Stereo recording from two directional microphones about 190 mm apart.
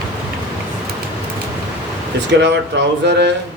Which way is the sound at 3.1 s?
65° right (ahead or behind).